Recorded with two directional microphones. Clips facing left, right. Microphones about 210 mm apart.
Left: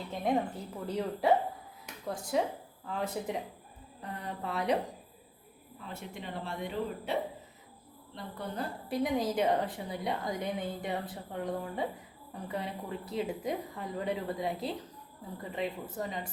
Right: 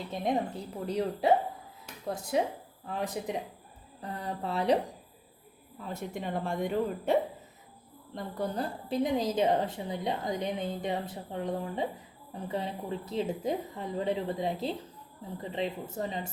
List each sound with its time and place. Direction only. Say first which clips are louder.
0.1 s a woman's voice: even; 20° right (ahead or behind)
2.3 s a woman's voice: right 1 dB; 20° right (ahead or behind)
4.0 s speech: right 3 dB; 35° right (ahead or behind)
5.9 s speech: right 6 dB; 45° right (ahead or behind)
8.9 s a woman's voice: right 1 dB; 20° right (ahead or behind)